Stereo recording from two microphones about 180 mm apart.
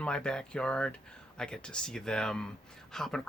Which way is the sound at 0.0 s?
5° left (ahead or behind).